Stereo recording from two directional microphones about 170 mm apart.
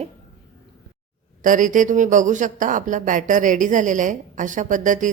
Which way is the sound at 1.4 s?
50° right (ahead or behind).